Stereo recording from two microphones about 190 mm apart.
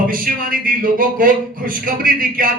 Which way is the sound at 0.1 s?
50° right (ahead or behind).